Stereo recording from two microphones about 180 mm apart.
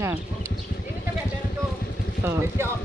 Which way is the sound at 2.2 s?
15° right (ahead or behind).